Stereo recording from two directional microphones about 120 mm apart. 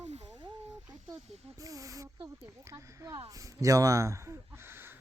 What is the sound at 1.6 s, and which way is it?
Speech, 30° right (ahead or behind).